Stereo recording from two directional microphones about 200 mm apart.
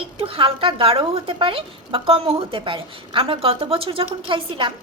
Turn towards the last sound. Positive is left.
turn(degrees=-25)  # may be behind; listen again after turning